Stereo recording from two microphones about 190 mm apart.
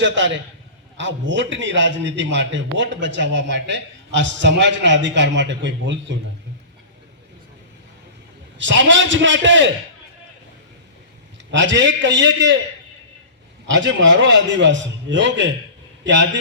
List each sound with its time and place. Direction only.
0.0 s a man's voice: 75° right (ahead or behind)
8.5 s a man's voice: 75° right (ahead or behind)
11.5 s a man's voice: 70° right (ahead or behind)
13.7 s a man's voice: 75° right (ahead or behind)